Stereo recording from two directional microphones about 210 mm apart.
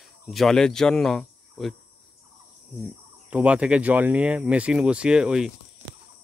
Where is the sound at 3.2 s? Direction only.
5° right (ahead or behind).